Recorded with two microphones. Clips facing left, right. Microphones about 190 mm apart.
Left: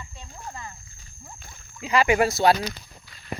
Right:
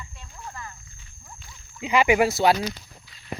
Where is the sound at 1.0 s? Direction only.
50° left (ahead or behind).